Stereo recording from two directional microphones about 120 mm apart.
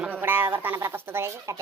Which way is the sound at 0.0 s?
15° right (ahead or behind).